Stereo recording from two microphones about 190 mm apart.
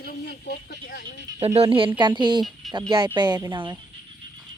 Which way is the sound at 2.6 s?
Centre (ahead or behind).